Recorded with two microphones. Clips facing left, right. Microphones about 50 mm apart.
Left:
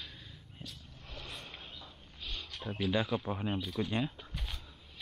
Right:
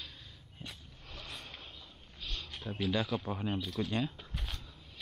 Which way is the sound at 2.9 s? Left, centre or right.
Centre.